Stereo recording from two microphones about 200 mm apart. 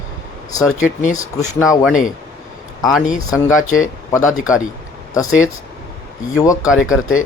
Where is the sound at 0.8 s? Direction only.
40° left (ahead or behind).